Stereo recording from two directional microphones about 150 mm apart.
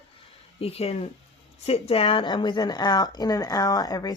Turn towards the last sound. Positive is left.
turn(degrees=25)  # may be behind; listen again after turning